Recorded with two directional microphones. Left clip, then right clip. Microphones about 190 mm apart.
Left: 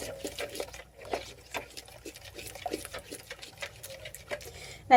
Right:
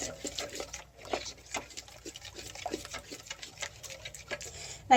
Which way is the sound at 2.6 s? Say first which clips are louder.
Left 2 dB; 10° right (ahead or behind).